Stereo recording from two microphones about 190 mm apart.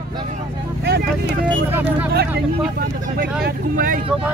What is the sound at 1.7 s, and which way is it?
Vehicle, 10° right (ahead or behind).